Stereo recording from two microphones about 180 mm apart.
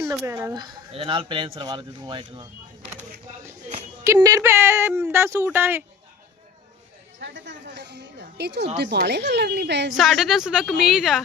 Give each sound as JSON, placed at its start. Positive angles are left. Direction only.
{"t": 0.1, "sound": "speech", "side_deg": -15}
{"t": 4.0, "sound": "a woman's voice", "side_deg": -15}
{"t": 7.2, "sound": "speech", "side_deg": -85}
{"t": 9.9, "sound": "a woman's voice", "side_deg": 0}